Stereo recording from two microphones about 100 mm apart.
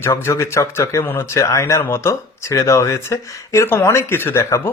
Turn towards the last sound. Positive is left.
turn(degrees=25)  # may be behind; listen again after turning